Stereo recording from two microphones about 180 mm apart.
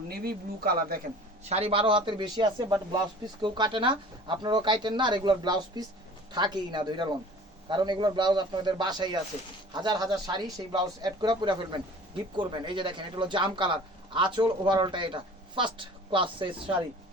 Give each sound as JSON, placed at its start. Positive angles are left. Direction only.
{"t": 0.1, "sound": "speech", "side_deg": -60}
{"t": 1.5, "sound": "speech", "side_deg": -35}